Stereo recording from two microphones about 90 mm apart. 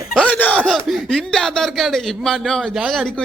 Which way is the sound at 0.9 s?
5° left (ahead or behind).